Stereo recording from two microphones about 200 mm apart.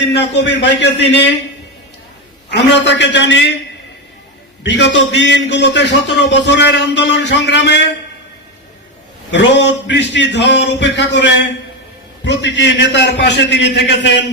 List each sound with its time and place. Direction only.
0.0 s a man's voice: 60° left (ahead or behind)
2.5 s a man's voice: 60° left (ahead or behind)
4.6 s a man's voice: 60° left (ahead or behind)
9.3 s a man's voice: 65° left (ahead or behind)